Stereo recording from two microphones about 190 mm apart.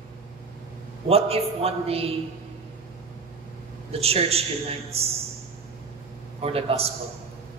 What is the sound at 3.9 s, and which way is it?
A man's voice, 30° right (ahead or behind).